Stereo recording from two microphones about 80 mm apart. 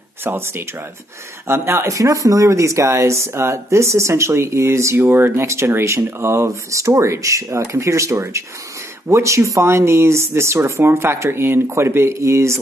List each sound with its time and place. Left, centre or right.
0.2 s speech: right